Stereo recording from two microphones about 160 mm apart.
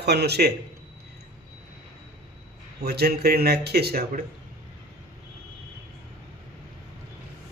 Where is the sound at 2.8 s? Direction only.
80° right.